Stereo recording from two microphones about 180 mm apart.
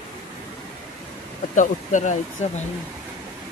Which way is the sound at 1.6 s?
45° left (ahead or behind).